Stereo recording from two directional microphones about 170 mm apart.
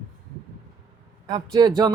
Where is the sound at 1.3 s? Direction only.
20° right (ahead or behind).